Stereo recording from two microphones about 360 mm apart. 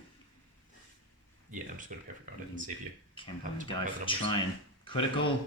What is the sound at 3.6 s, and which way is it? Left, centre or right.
Speech, centre.